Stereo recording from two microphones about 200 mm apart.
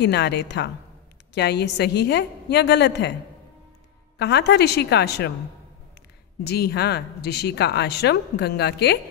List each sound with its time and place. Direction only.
0.0 s speech: 55° left (ahead or behind)
4.2 s speech: 55° left (ahead or behind)
6.4 s speech: 55° left (ahead or behind)